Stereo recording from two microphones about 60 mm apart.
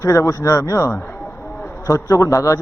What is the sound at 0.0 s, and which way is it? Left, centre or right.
A man's voice, left.